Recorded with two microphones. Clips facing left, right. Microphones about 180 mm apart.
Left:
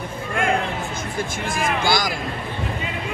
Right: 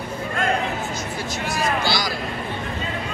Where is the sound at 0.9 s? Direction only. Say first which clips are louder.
Left 1 dB; 50° left (ahead or behind).